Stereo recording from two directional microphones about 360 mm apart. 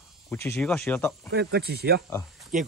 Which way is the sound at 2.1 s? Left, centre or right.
Centre.